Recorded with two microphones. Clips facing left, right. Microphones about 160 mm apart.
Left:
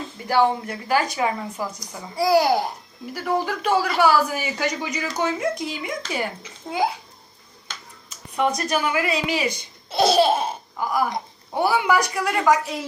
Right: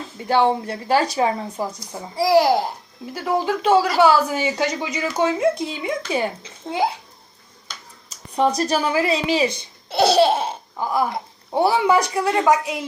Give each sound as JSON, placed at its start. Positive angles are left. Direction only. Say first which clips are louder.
{"t": 0.3, "sound": "speech", "louder": "right 2 dB", "side_deg": -25}
{"t": 8.4, "sound": "speech", "louder": "right 3 dB", "side_deg": -35}